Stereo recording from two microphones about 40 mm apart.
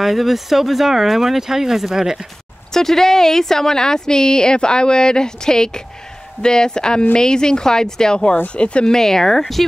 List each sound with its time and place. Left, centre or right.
0.0 s speech: centre
2.7 s a woman's voice: centre; by 8.8 s left
8.8 s a woman's voice: centre